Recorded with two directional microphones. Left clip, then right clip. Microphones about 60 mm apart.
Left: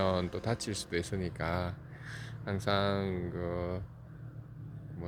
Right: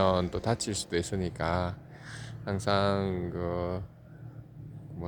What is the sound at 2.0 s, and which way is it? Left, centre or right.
Speech, centre.